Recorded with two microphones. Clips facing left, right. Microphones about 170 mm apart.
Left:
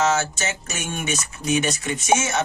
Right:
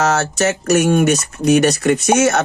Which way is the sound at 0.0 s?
70° right (ahead or behind).